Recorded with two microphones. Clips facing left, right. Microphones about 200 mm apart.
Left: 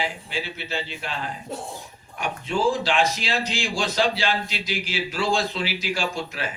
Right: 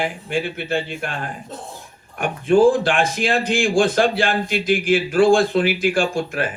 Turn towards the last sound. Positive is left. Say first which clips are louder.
# right 7 dB
turn(degrees=-50)  # may be behind; listen again after turning